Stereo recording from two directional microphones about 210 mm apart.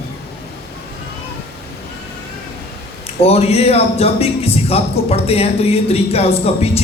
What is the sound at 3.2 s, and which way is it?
Speech, 30° left (ahead or behind).